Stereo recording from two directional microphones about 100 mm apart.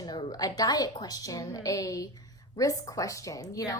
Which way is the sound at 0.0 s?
45° left (ahead or behind).